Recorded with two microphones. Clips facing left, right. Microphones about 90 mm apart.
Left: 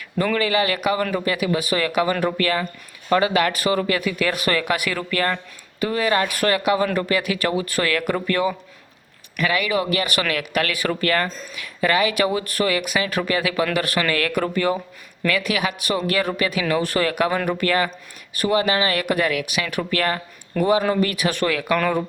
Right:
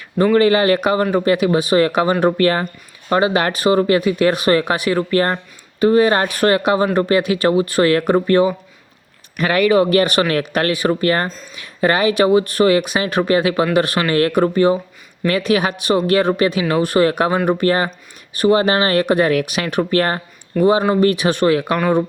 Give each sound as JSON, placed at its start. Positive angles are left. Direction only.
{"t": 0.3, "sound": "speech", "side_deg": -35}
{"t": 9.4, "sound": "speech", "side_deg": -40}